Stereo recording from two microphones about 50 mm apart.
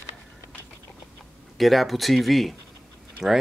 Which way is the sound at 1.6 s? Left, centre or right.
Centre.